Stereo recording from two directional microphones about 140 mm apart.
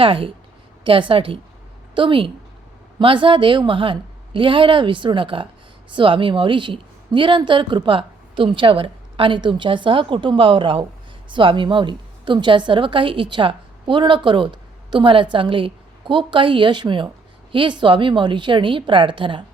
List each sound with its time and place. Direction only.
0.0 s a woman's voice: 40° right (ahead or behind)